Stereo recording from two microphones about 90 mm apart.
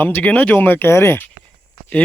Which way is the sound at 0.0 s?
20° left (ahead or behind).